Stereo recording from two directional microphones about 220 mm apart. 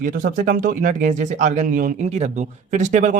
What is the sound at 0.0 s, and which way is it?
Speech, 40° right (ahead or behind).